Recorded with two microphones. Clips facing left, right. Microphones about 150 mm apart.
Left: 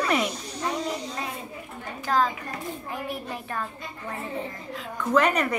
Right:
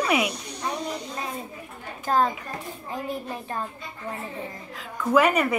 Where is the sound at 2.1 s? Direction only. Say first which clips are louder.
Right 1 dB; 35° right (ahead or behind).